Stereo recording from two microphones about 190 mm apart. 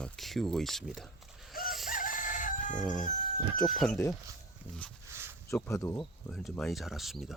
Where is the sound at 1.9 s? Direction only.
45° left (ahead or behind).